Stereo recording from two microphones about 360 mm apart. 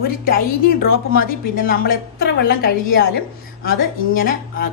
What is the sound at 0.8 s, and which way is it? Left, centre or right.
A woman's voice, left.